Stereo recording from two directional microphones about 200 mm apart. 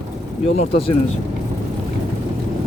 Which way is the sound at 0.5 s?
30° left (ahead or behind).